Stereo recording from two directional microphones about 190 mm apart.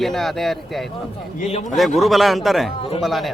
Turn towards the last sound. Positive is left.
turn(degrees=0)  # may be behind; listen again after turning